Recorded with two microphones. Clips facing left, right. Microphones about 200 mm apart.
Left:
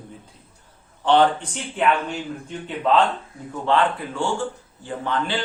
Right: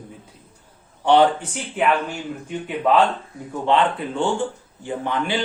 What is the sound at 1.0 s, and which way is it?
Speech, 10° right (ahead or behind).